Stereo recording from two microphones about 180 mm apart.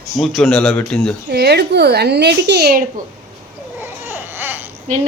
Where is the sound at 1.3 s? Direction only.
65° right (ahead or behind).